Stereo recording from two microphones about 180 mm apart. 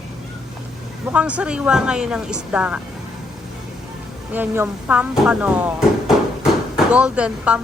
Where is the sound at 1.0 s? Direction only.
5° right (ahead or behind).